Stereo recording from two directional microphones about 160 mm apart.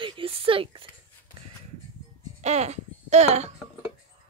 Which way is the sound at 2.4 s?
45° right (ahead or behind).